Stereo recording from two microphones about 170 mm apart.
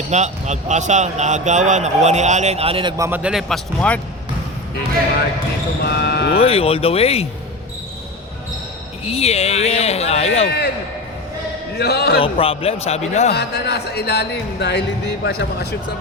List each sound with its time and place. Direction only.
0.1 s a man's voice: 40° right (ahead or behind)
3.0 s speech: 10° right (ahead or behind); by 4.0 s 5° left (ahead or behind)
5.8 s speech: 70° left (ahead or behind)
6.4 s speech: 35° left (ahead or behind)
9.0 s speech: 35° left (ahead or behind)
11.8 s speech: 70° left (ahead or behind)
12.2 s speech: 35° left (ahead or behind)
13.3 s speech: 75° left (ahead or behind)